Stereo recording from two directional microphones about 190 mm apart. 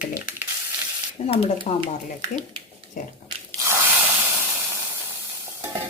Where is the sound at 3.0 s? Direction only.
45° left (ahead or behind).